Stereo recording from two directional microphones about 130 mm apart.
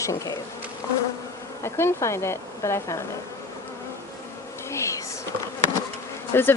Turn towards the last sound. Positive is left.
turn(degrees=15)  # may be behind; listen again after turning